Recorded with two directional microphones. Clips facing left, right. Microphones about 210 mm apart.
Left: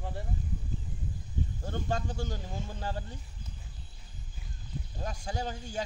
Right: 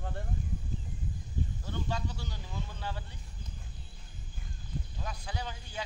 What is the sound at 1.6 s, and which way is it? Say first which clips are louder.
Speech: left 5 dB; 50° left (ahead or behind).